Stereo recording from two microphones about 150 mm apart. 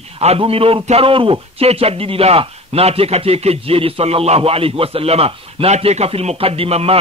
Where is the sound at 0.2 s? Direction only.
40° right (ahead or behind).